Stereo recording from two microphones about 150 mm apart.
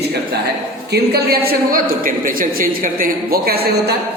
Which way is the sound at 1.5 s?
75° right (ahead or behind).